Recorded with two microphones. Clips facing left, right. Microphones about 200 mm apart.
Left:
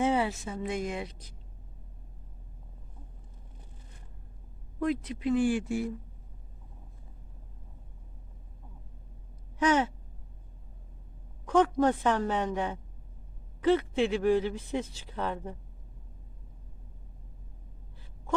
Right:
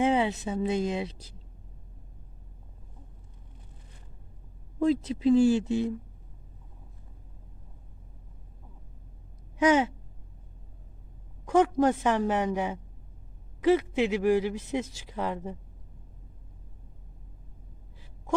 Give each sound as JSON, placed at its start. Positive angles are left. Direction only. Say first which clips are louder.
{"t": 0.0, "sound": "a woman's voice", "louder": "right 3 dB", "side_deg": -15}
{"t": 4.8, "sound": "a woman's voice", "louder": "right 5 dB", "side_deg": -25}
{"t": 9.6, "sound": "a woman's voice", "louder": "right 3 dB", "side_deg": -10}
{"t": 11.4, "sound": "a woman's voice", "louder": "right 2 dB", "side_deg": -10}